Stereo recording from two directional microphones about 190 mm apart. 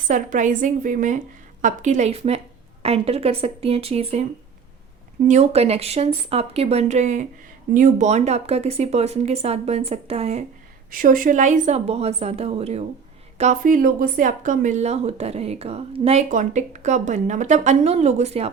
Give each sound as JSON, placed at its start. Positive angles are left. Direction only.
{"t": 0.1, "sound": "a woman's voice", "side_deg": -40}
{"t": 5.3, "sound": "speech", "side_deg": -35}
{"t": 10.9, "sound": "speech", "side_deg": -45}